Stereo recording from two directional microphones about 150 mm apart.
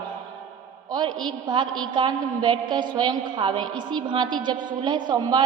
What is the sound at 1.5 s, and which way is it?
A woman's voice, 30° right (ahead or behind).